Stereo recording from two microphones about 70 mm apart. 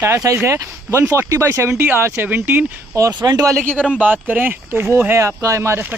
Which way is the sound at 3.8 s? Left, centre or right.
Centre.